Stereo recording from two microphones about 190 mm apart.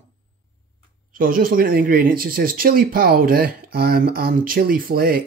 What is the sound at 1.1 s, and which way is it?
Speech, 50° right (ahead or behind).